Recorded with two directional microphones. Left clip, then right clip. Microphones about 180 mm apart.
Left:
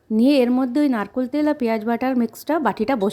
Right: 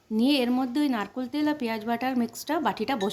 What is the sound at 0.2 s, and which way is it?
Speech, 40° left (ahead or behind).